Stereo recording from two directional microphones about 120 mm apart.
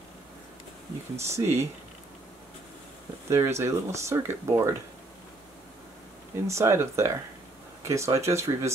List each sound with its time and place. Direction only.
1.2 s speech: 25° right (ahead or behind)
3.3 s speech: 25° right (ahead or behind)
6.4 s speech: 25° right (ahead or behind)